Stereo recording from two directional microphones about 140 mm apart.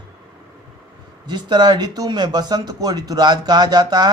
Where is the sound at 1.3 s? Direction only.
30° right (ahead or behind).